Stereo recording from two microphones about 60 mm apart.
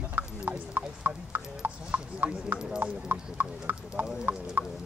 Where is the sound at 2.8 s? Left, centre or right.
Right.